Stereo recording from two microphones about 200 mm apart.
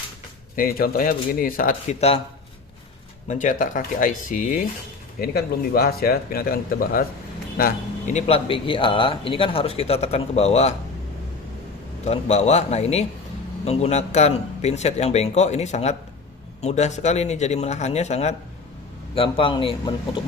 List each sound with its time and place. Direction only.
0.5 s speech: 45° left (ahead or behind)
3.2 s a man's voice: 40° left (ahead or behind)
12.0 s a man's voice: 35° left (ahead or behind)